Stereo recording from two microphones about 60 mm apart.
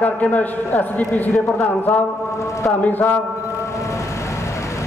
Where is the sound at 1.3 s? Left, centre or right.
Centre.